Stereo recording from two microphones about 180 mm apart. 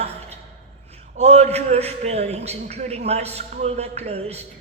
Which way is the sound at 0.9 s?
35° right (ahead or behind).